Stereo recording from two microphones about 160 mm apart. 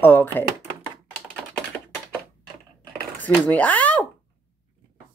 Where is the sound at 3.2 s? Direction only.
10° left (ahead or behind).